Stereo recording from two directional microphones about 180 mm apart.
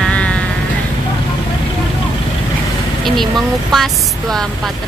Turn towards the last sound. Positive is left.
turn(degrees=0)  # may be behind; listen again after turning